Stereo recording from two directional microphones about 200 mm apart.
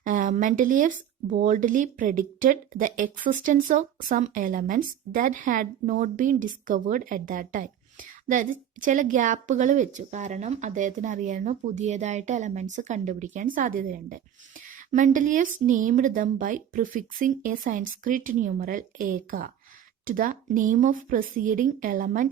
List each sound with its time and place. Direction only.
0.0 s a woman's voice: 40° right (ahead or behind)